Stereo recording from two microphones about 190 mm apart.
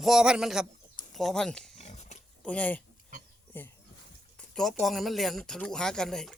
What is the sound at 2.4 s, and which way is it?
Speech, 5° left (ahead or behind).